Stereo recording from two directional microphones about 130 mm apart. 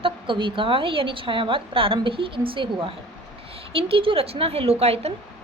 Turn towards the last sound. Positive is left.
turn(degrees=-50)  # may be behind; listen again after turning